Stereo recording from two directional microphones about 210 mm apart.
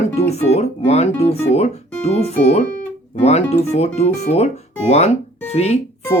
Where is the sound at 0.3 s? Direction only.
30° left (ahead or behind).